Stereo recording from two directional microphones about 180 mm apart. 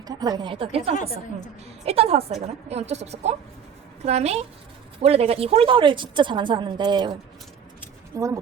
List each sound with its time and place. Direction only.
0.0 s a woman's voice: 20° right (ahead or behind)